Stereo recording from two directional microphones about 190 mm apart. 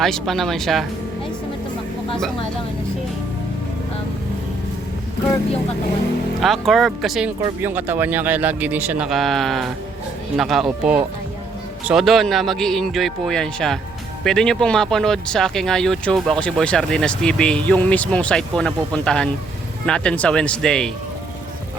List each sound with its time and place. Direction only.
0.0 s speech: centre (ahead or behind)
6.4 s a man's voice: centre (ahead or behind)